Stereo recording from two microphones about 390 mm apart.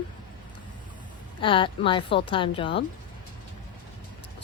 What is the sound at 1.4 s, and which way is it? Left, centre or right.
Speech, centre.